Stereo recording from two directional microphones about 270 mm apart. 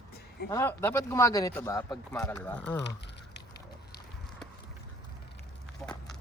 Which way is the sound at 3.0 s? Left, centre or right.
Left.